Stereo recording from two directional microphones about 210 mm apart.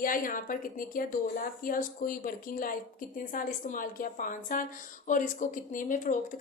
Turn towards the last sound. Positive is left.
turn(degrees=40)  # may be behind; listen again after turning